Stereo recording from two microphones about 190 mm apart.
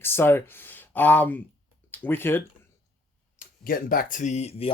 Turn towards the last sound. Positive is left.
turn(degrees=35)  # may be behind; listen again after turning